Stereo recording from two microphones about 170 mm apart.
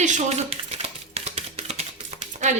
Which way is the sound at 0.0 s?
45° right (ahead or behind).